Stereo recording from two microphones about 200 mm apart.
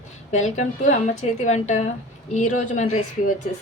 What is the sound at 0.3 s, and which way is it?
Speech, 35° left (ahead or behind).